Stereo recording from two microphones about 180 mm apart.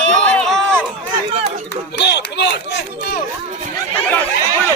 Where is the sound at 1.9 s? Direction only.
70° left (ahead or behind).